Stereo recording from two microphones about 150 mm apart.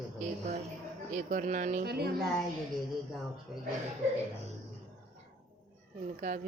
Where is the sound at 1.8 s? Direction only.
90° right.